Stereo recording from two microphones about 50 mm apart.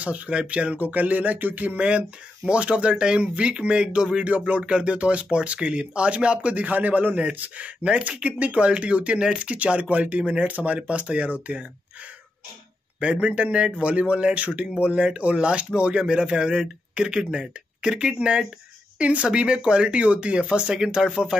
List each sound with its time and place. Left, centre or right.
0.0 s speech: right
0.7 s a sound: right
1.9 s speech: right
4.3 s speech: right
13.0 s speech: right